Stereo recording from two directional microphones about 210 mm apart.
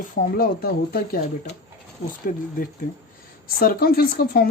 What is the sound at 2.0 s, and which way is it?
Speech, 40° left (ahead or behind).